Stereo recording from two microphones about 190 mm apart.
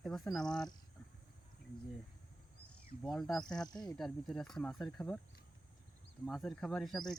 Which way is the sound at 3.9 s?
Centre (ahead or behind).